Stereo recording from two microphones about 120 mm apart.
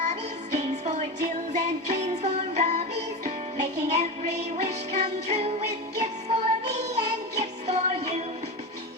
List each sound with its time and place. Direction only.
0.0 s music: 70° right (ahead or behind)